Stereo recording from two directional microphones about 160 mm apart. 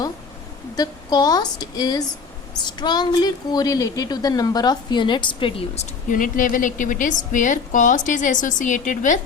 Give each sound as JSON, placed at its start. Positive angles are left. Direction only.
{"t": 0.8, "sound": "a woman's voice", "side_deg": 25}